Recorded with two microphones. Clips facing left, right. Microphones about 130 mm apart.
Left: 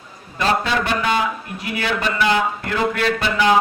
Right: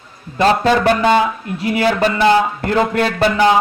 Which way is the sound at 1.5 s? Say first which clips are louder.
Right 10 dB; 30° right (ahead or behind).